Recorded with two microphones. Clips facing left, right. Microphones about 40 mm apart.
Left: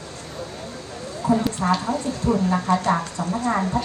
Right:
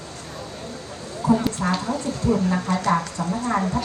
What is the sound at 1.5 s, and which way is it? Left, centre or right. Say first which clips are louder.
Speech: left 2 dB; left.